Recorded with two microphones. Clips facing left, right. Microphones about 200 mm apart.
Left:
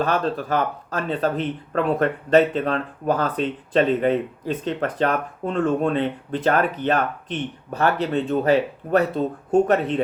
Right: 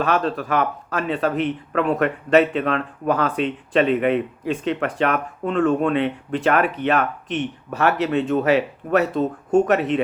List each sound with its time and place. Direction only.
0.0 s speech: 35° left (ahead or behind)